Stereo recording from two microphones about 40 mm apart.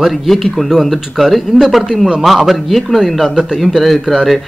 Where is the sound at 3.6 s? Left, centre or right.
Centre.